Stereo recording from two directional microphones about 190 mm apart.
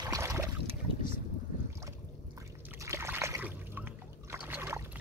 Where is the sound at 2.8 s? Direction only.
15° right (ahead or behind).